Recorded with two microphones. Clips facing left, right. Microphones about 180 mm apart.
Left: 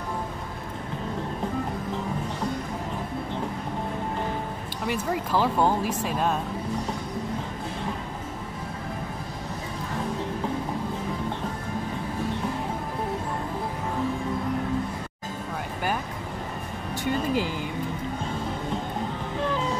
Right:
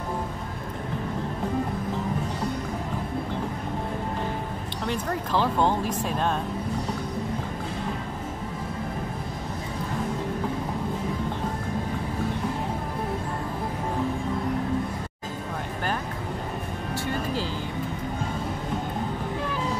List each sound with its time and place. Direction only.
4.8 s speech: 10° left (ahead or behind)
17.0 s music: 15° left (ahead or behind)